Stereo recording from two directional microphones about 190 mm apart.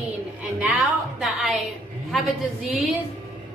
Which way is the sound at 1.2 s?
Centre (ahead or behind).